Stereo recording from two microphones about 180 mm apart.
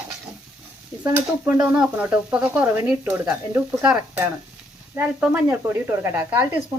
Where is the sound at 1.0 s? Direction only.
10° right (ahead or behind).